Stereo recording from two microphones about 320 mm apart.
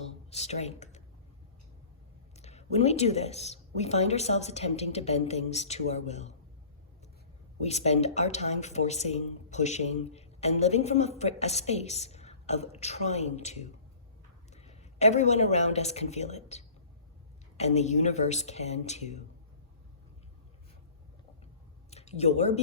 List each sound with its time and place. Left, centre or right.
0.3 s speech: centre
2.3 s speech: centre
7.6 s a man's voice: centre
21.8 s a sound: centre